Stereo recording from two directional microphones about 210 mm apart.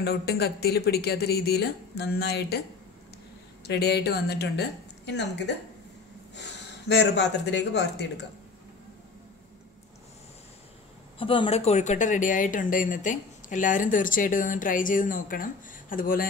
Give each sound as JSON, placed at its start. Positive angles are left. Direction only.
{"t": 0.0, "sound": "speech", "side_deg": 50}
{"t": 3.6, "sound": "speech", "side_deg": 50}
{"t": 6.9, "sound": "speech", "side_deg": 55}
{"t": 11.1, "sound": "speech", "side_deg": 25}